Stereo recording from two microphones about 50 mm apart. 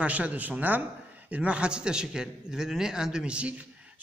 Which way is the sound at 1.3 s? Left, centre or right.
Right.